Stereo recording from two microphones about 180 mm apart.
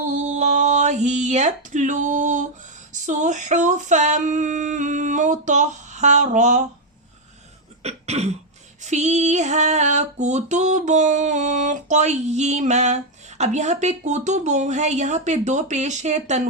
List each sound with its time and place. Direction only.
0.0 s a sound: 40° right (ahead or behind)
2.9 s female singing: 45° right (ahead or behind)
7.8 s cough: 35° right (ahead or behind)
8.8 s female singing: 40° right (ahead or behind)